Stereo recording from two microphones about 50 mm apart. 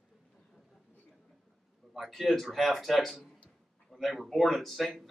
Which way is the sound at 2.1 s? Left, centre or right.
Centre.